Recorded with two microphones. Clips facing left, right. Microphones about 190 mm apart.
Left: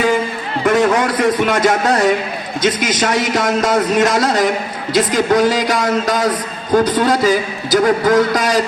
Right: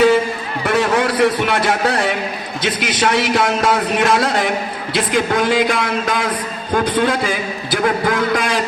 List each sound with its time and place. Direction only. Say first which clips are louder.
0.6 s speech: left 3 dB; 40° left (ahead or behind)